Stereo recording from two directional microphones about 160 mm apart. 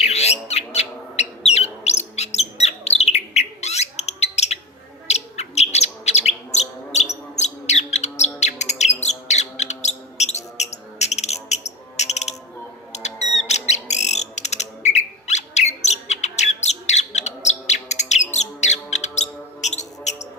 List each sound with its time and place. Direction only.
0.0 s bird: 40° left (ahead or behind)
18.3 s music: 45° left (ahead or behind)